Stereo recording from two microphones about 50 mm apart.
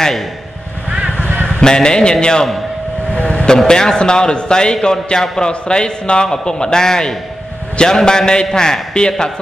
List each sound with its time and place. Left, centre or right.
1.6 s a man's voice: centre